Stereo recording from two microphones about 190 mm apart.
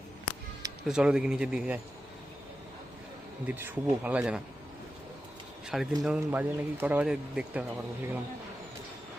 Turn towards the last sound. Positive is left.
turn(degrees=-5)  # may be behind; listen again after turning